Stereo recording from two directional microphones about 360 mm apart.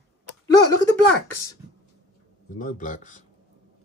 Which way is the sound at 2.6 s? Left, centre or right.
Left.